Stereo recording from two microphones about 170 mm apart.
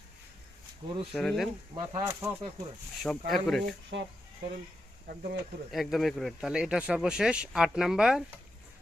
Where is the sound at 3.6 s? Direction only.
90° right.